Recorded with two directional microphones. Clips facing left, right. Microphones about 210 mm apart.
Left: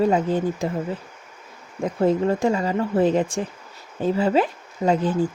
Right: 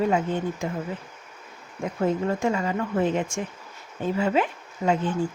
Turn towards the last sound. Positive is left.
turn(degrees=35)  # may be behind; listen again after turning